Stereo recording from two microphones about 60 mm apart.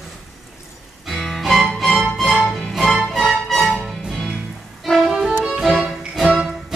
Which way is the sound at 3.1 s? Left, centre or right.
Centre.